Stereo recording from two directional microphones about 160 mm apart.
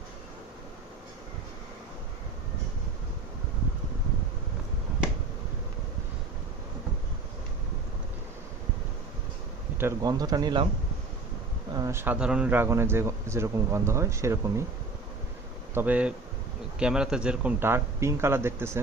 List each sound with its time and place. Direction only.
9.7 s speech: 20° right (ahead or behind)
11.8 s speech: 15° right (ahead or behind)
15.7 s speech: 10° right (ahead or behind)